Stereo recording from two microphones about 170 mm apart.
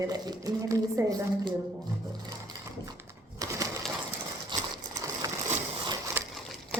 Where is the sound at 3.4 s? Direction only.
20° right (ahead or behind).